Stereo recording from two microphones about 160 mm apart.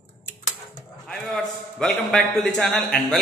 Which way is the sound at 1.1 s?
5° left (ahead or behind).